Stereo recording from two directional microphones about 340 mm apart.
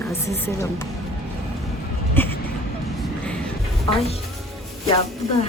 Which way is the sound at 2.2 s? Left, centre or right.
Centre.